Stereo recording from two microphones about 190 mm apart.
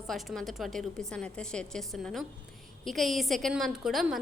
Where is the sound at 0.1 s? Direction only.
Centre (ahead or behind).